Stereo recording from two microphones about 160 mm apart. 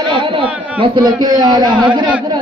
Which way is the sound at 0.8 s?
25° right (ahead or behind).